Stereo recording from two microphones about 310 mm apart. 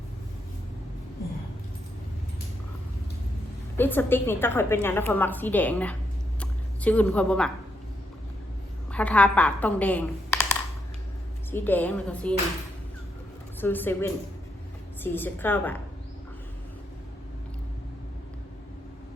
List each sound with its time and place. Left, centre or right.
3.8 s a woman's voice: centre
6.4 s a sound: centre
8.9 s speech: centre
11.5 s a woman's voice: centre
13.6 s a woman's voice: centre